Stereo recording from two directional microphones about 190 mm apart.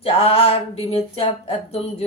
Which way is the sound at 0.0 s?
30° left (ahead or behind).